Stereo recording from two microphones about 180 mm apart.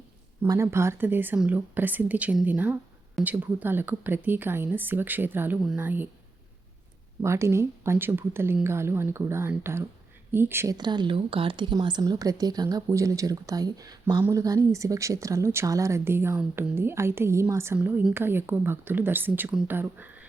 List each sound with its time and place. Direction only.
0.4 s speech: 15° right (ahead or behind)
7.2 s speech: 15° right (ahead or behind)